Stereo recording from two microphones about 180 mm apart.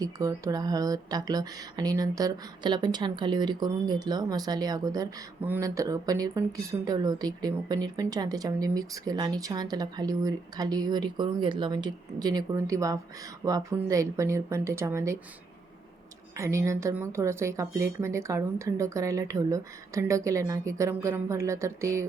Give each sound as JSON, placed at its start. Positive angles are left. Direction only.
{"t": 0.0, "sound": "speech", "side_deg": -20}
{"t": 16.4, "sound": "speech", "side_deg": -15}